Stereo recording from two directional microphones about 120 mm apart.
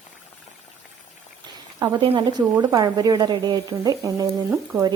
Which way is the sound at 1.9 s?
40° right (ahead or behind).